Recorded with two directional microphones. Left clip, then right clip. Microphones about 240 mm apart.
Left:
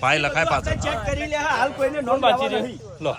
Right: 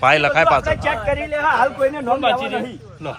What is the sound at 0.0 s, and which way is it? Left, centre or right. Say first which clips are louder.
Speech: right 6 dB; centre.